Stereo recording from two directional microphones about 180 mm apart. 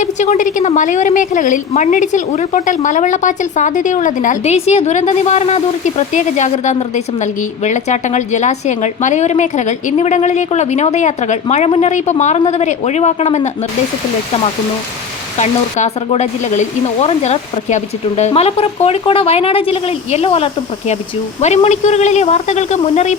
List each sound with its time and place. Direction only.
0.0 s a woman's voice: 40° left (ahead or behind)
15.4 s a woman's voice: 40° left (ahead or behind)